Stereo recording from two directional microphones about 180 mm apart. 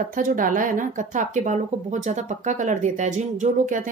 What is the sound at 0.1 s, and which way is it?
Speech, 50° right (ahead or behind).